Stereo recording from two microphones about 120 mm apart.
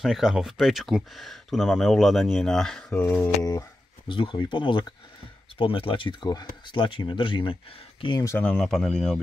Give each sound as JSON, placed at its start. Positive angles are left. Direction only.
{"t": 0.0, "sound": "speech", "side_deg": -5}
{"t": 3.0, "sound": "a sound", "side_deg": 15}
{"t": 4.1, "sound": "speech", "side_deg": 45}
{"t": 8.5, "sound": "speech", "side_deg": 5}